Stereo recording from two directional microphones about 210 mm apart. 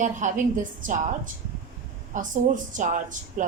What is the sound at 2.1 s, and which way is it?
A woman's voice, 35° right (ahead or behind).